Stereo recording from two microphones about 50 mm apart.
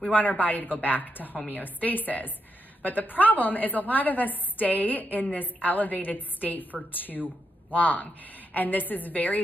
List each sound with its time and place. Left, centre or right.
0.1 s a woman's voice: left